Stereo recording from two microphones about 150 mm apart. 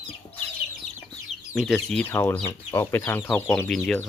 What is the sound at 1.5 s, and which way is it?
Speech, 5° left (ahead or behind).